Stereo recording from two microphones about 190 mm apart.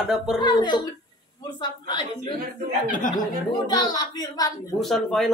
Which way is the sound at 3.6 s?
20° left (ahead or behind).